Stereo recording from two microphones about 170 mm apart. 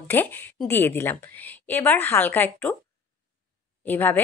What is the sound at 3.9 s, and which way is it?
Speech, 10° left (ahead or behind).